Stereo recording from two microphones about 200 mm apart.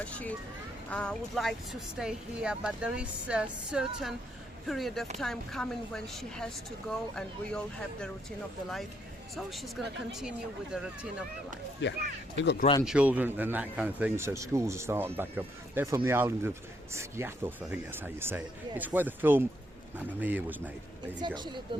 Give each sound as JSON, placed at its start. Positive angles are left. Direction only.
{"t": 0.0, "sound": "a child's voice", "side_deg": 5}
{"t": 11.8, "sound": "speech", "side_deg": 65}
{"t": 12.8, "sound": "speech", "side_deg": -5}
{"t": 21.2, "sound": "speech", "side_deg": -20}